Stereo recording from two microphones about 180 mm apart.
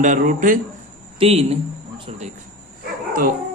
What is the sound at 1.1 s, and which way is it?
Speech, 35° right (ahead or behind).